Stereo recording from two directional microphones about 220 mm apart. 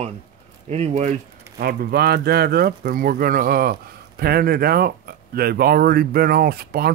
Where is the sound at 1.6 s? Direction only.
45° right (ahead or behind).